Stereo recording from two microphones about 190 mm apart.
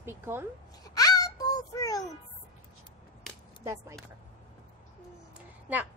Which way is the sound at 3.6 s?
15° right (ahead or behind).